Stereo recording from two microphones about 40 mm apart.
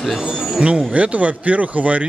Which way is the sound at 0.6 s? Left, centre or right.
Right.